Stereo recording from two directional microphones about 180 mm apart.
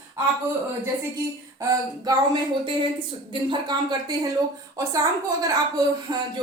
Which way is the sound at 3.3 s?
25° right (ahead or behind).